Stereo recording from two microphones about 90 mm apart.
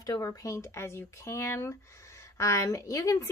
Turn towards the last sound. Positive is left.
turn(degrees=35)  # may be behind; listen again after turning